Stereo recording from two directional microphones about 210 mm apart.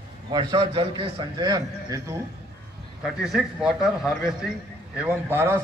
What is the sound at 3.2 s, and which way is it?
A man's voice, centre (ahead or behind).